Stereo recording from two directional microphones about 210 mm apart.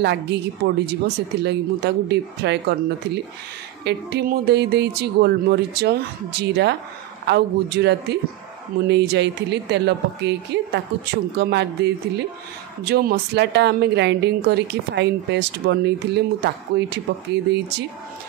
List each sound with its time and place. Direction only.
0.0 s a woman's voice: 55° right (ahead or behind)
3.8 s a woman's voice: 50° right (ahead or behind)